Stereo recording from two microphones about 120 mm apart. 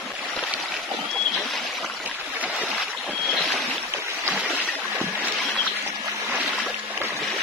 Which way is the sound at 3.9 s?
15° right (ahead or behind).